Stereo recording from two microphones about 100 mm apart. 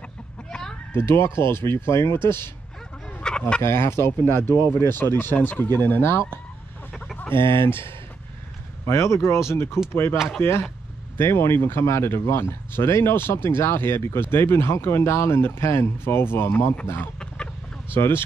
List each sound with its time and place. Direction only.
0.5 s chicken: 5° left (ahead or behind)
0.9 s speech: 25° left (ahead or behind)
3.1 s chicken: 10° left (ahead or behind)
3.6 s speech: 25° left (ahead or behind)
10.1 s speech: 5° right (ahead or behind)
10.4 s speech: 25° left (ahead or behind)